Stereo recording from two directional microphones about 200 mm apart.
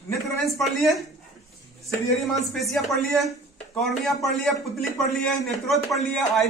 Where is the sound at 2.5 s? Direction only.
Centre (ahead or behind).